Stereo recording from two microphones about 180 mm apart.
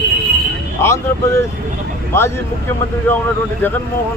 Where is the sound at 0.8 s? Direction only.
15° left (ahead or behind).